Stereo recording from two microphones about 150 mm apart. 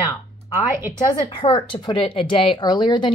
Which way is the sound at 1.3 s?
35° left (ahead or behind).